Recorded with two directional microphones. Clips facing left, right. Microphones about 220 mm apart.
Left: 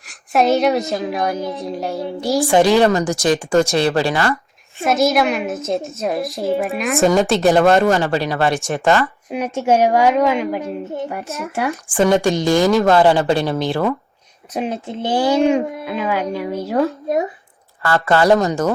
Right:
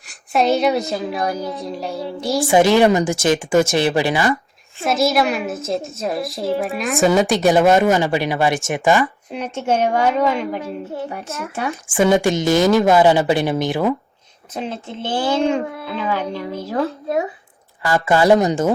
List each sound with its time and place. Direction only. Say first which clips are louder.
0.1 s a woman's voice: left 2 dB; centre (ahead or behind)
2.7 s speech: even; 15° right (ahead or behind)
4.8 s a woman's voice: left 2 dB; centre (ahead or behind)
9.3 s a child's voice: left 5 dB; 10° left (ahead or behind); by 12.3 s 10° right (ahead or behind)
12.4 s speech: even; 20° right (ahead or behind)
12.6 s speech: even; 5° right (ahead or behind)
13.3 s speech: even; 20° right (ahead or behind)
14.5 s a child's voice: left 4 dB; 15° left (ahead or behind)
17.8 s speech: even; 10° right (ahead or behind)